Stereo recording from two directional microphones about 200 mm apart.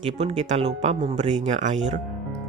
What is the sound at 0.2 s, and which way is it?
Speech, 35° right (ahead or behind).